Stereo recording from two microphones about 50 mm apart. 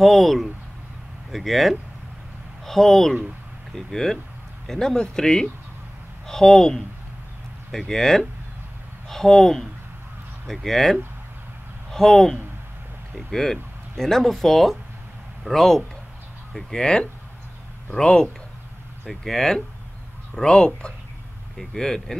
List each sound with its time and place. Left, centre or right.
0.0 s speech: centre